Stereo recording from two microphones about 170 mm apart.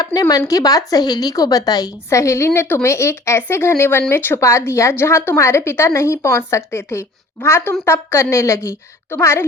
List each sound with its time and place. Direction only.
0.0 s a woman's voice: 20° left (ahead or behind)